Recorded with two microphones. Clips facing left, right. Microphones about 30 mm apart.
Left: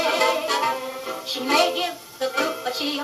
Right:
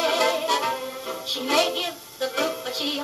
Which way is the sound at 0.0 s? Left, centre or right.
Centre.